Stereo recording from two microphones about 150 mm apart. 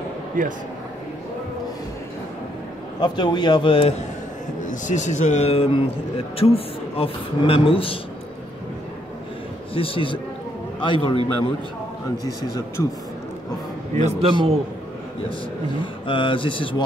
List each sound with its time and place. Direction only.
0.4 s speech: 65° right (ahead or behind)
3.0 s a man's voice: 30° left (ahead or behind)
4.6 s a man's voice: 55° left (ahead or behind); by 8.0 s 35° left (ahead or behind)
9.8 s a man's voice: 35° left (ahead or behind)
12.3 s speech: 20° left (ahead or behind)
13.9 s a man's voice: 50° right (ahead or behind)
15.8 s a man's voice: 35° left (ahead or behind)